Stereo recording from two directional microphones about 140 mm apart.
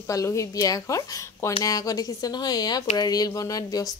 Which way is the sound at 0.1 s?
20° left (ahead or behind).